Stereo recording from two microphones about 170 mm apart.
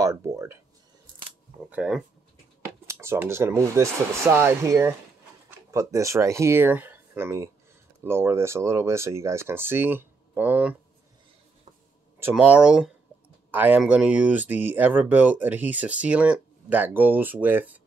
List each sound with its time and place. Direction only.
0.0 s a sound: 15° right (ahead or behind)
1.7 s speech: 5° right (ahead or behind)
2.9 s speech: 15° right (ahead or behind)
12.2 s speech: 10° right (ahead or behind)